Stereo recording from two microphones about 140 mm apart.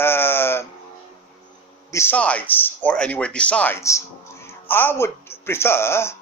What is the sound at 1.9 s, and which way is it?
Speech, 15° left (ahead or behind).